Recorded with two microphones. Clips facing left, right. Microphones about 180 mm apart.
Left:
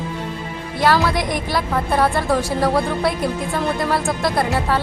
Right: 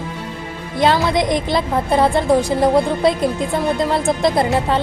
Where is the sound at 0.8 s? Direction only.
20° right (ahead or behind).